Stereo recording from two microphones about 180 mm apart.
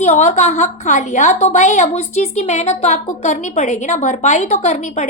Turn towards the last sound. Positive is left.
turn(degrees=40)  # may be behind; listen again after turning